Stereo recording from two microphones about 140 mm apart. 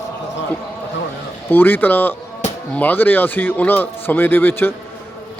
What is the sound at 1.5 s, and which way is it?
Speech, 15° left (ahead or behind).